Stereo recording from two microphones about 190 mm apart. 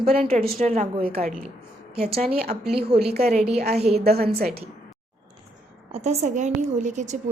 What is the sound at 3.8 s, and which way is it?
Speech, 35° right (ahead or behind).